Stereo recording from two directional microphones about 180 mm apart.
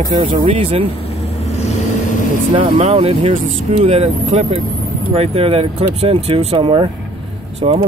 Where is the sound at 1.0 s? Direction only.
35° left (ahead or behind).